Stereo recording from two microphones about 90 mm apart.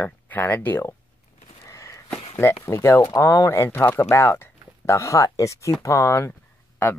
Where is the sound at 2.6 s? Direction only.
30° left (ahead or behind).